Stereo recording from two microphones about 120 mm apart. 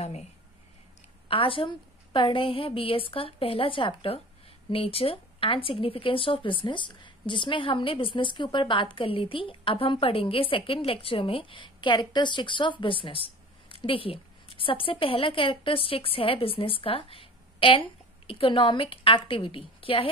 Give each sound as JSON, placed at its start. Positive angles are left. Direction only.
{"t": 1.3, "sound": "a woman's voice", "side_deg": 50}